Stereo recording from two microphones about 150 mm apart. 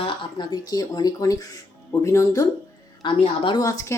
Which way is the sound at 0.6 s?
25° left (ahead or behind).